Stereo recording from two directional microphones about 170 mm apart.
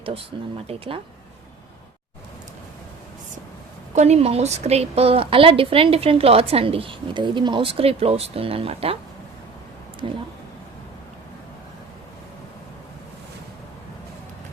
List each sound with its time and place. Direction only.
0.3 s a woman's voice: 30° right (ahead or behind)
3.9 s a woman's voice: 40° right (ahead or behind)
10.0 s speech: 30° right (ahead or behind)